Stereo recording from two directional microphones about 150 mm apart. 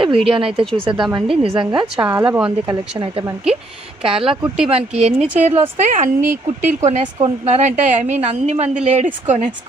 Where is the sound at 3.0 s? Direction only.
25° right (ahead or behind).